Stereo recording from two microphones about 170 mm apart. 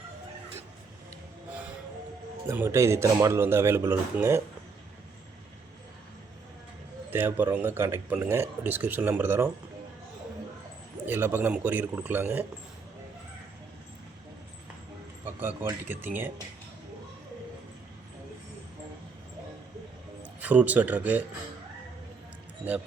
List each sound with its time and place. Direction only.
1.5 s music: 10° right (ahead or behind)
2.5 s speech: 15° right (ahead or behind)
7.1 s speech: 10° right (ahead or behind)
11.0 s speech: 15° right (ahead or behind)
15.4 s speech: 10° right (ahead or behind)
20.4 s speech: 10° right (ahead or behind)